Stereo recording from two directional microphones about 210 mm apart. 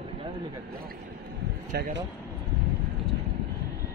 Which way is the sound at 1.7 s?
50° right (ahead or behind).